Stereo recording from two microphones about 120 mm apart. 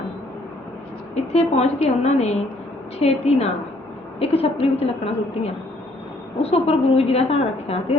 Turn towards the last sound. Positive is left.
turn(degrees=60)  # may be behind; listen again after turning